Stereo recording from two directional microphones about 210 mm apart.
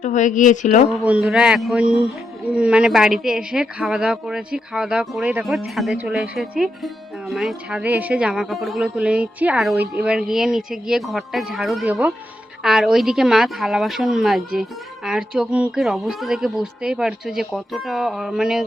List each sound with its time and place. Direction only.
0.0 s speech: 35° left (ahead or behind)
1.0 s a woman's voice: 5° right (ahead or behind)